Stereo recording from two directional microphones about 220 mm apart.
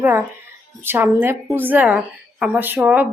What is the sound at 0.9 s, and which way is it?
A woman's voice, 10° right (ahead or behind).